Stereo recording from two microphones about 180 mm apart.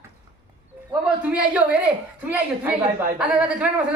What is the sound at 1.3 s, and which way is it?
Speech, 5° right (ahead or behind).